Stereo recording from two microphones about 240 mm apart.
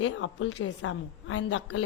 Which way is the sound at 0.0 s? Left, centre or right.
Left.